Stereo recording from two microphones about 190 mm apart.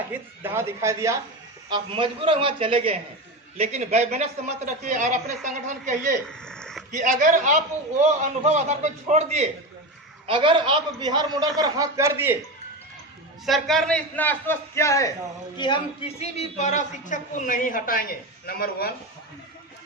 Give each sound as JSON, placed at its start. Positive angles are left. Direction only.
{"t": 0.1, "sound": "speech", "side_deg": -10}
{"t": 1.7, "sound": "a man's voice", "side_deg": -25}
{"t": 6.2, "sound": "a sound", "side_deg": 5}
{"t": 6.9, "sound": "a man's voice", "side_deg": -45}
{"t": 13.4, "sound": "a man's voice", "side_deg": 0}